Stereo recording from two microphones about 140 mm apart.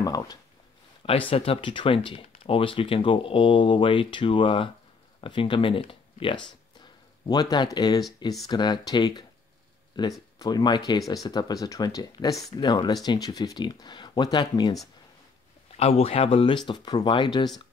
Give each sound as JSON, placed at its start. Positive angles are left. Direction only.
{"t": 0.0, "sound": "speech", "side_deg": 25}
{"t": 1.3, "sound": "speech", "side_deg": 40}
{"t": 7.2, "sound": "speech", "side_deg": 30}
{"t": 15.7, "sound": "speech", "side_deg": 45}